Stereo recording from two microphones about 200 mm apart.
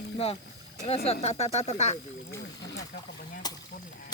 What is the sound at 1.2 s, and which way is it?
Speech, 30° left (ahead or behind).